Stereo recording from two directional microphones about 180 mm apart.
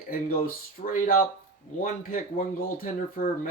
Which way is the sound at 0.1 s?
50° left (ahead or behind).